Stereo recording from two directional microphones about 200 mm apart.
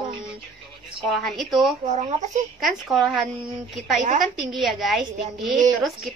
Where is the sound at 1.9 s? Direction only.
35° right (ahead or behind).